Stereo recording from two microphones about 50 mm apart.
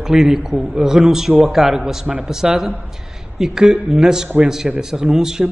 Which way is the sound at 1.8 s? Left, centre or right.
Centre.